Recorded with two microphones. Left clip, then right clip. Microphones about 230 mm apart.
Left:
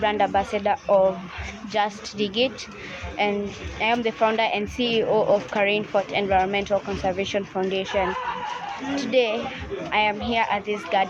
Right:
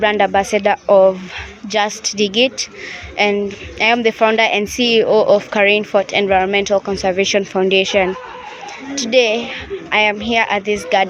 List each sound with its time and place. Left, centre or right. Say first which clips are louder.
0.0 s a woman's voice: right 7 dB; right